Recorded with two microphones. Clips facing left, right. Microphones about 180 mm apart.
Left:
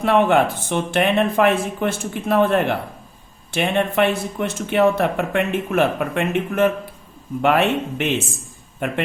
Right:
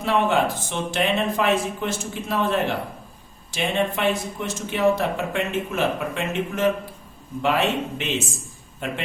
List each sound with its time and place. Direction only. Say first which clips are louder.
0.0 s speech: left 5 dB; 60° left (ahead or behind)